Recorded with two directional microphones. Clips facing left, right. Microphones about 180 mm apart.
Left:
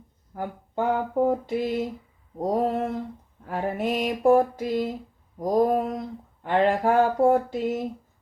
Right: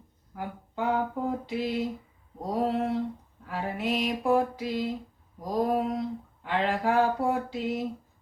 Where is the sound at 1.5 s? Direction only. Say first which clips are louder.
Left 3 dB; 50° left (ahead or behind).